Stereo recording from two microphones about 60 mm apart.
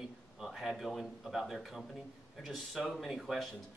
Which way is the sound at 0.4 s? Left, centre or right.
Centre.